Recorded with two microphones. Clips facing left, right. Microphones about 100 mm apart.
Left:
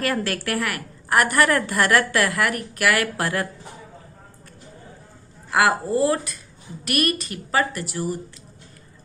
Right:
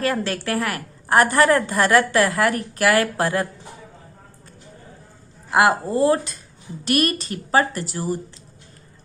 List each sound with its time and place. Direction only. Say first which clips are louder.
0.0 s a woman's voice: right 1 dB; 25° right (ahead or behind)
5.5 s a woman's voice: right 2 dB; 25° right (ahead or behind)